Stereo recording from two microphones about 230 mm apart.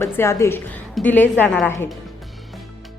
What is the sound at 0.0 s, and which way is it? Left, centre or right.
A woman's voice, centre.